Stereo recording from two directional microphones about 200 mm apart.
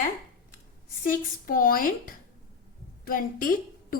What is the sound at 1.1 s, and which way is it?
A woman's voice, 45° left (ahead or behind).